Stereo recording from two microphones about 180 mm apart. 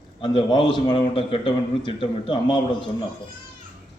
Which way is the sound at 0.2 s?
25° left (ahead or behind).